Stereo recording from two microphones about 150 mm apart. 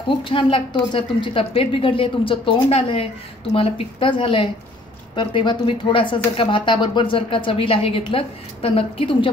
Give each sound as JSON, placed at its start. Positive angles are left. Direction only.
{"t": 0.2, "sound": "speech", "side_deg": 35}